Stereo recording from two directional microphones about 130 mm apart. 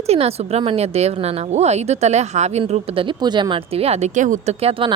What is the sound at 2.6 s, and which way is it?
Speech, 45° right (ahead or behind).